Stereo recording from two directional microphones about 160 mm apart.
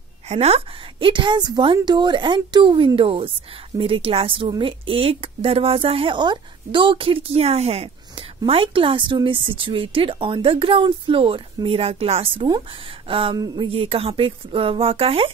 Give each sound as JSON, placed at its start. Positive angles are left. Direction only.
{"t": 0.3, "sound": "a woman's voice", "side_deg": -40}